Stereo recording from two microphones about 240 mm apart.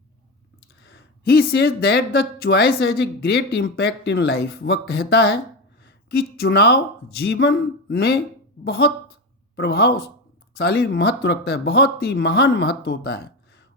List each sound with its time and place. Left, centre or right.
0.8 s speech: left